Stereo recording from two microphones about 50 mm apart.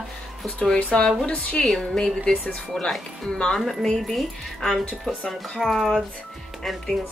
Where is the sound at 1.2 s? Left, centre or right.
Left.